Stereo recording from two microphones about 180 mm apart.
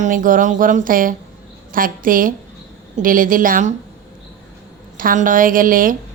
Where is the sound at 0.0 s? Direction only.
45° right (ahead or behind).